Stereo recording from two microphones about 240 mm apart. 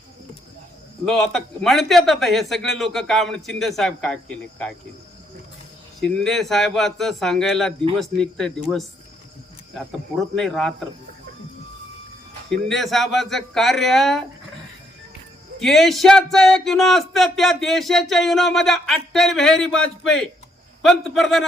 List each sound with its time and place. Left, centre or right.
1.0 s speech: centre
6.0 s speech: centre
10.3 s speech: centre
12.5 s speech: centre
15.5 s speech: centre